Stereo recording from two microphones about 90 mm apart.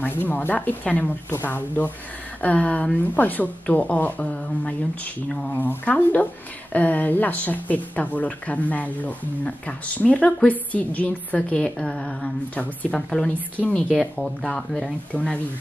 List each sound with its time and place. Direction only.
0.0 s speech: 20° left (ahead or behind)